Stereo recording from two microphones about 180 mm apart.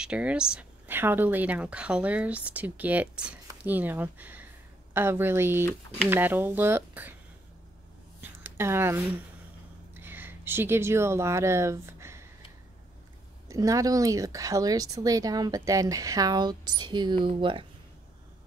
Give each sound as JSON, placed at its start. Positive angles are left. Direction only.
{"t": 0.0, "sound": "speech", "side_deg": -5}
{"t": 8.2, "sound": "a sound", "side_deg": -10}
{"t": 9.9, "sound": "speech", "side_deg": -10}
{"t": 13.5, "sound": "speech", "side_deg": -20}